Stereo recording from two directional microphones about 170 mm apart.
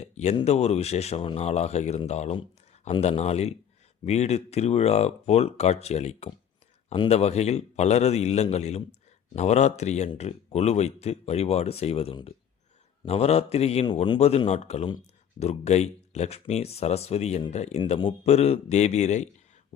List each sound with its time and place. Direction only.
0.0 s a man's voice: 40° left (ahead or behind)